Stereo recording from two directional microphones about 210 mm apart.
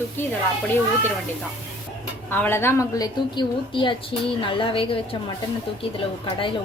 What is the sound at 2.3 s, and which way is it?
A woman's voice, 10° left (ahead or behind).